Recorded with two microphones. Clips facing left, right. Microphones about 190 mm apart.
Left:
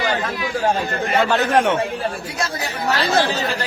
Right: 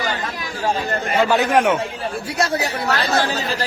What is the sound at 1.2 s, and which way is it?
Speech, 10° right (ahead or behind).